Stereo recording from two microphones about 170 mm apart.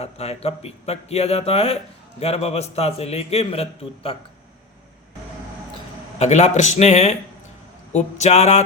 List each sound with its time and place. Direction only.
0.0 s a man's voice: 40° left (ahead or behind)
6.1 s a man's voice: 40° left (ahead or behind)